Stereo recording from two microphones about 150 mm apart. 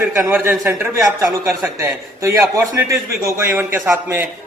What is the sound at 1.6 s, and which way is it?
A man's voice, 15° right (ahead or behind).